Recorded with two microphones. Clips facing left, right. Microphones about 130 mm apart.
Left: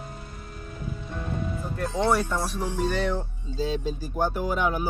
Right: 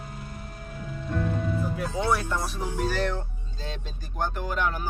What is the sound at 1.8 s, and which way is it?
Speech, centre (ahead or behind).